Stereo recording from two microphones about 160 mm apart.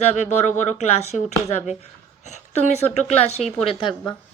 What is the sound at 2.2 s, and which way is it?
A woman's voice, 45° left (ahead or behind).